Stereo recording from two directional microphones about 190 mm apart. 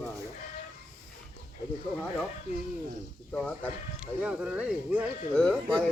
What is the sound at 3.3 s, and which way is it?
Speech, 5° left (ahead or behind).